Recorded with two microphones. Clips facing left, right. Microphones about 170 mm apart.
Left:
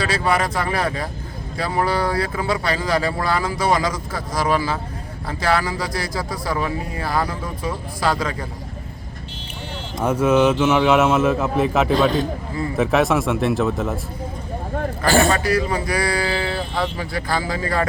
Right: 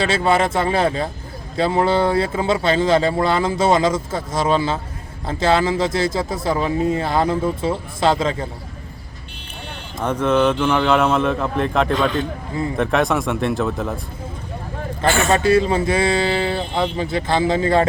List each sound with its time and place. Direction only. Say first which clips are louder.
0.0 s speech: right 3 dB; 25° right (ahead or behind)
10.0 s a man's voice: left 1 dB; 10° left (ahead or behind)
15.0 s a man's voice: left 2 dB; 35° left (ahead or behind)
15.3 s speech: right 4 dB; 25° right (ahead or behind)